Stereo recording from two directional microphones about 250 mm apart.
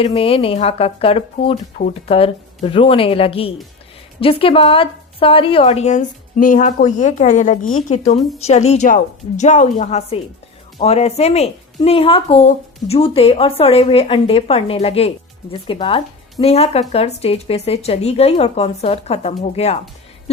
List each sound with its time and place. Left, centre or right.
0.0 s a woman's voice: left